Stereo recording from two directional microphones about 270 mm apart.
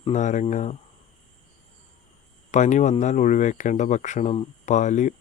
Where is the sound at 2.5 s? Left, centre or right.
Left.